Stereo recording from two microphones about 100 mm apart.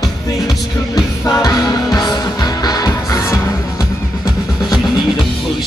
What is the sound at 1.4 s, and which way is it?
Music, 40° left (ahead or behind).